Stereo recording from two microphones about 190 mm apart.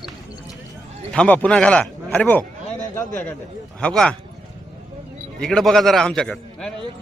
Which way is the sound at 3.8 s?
5° left (ahead or behind).